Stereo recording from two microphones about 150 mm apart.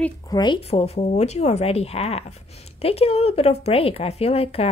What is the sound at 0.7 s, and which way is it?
A woman's voice, 45° left (ahead or behind).